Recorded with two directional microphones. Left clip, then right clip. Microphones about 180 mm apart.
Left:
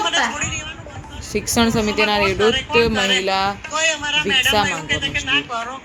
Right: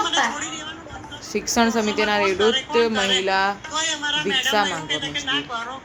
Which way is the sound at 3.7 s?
30° left (ahead or behind).